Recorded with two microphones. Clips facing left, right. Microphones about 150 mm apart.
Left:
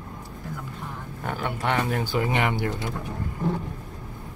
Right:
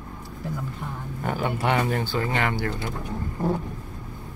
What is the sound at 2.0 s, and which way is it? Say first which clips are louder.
Speech: left 1 dB; 15° left (ahead or behind).